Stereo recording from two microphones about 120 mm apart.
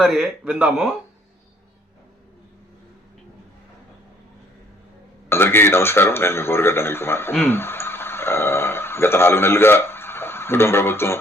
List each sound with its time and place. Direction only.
0.0 s speech: centre (ahead or behind)
5.3 s a man's voice: 20° left (ahead or behind)